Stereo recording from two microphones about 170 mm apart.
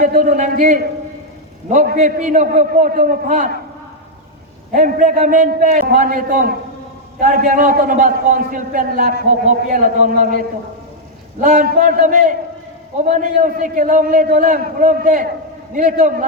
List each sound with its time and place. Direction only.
0.0 s a man's voice: 50° right (ahead or behind)
4.7 s a man's voice: 45° right (ahead or behind)